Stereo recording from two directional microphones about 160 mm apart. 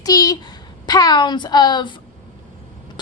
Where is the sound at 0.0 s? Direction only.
25° left (ahead or behind).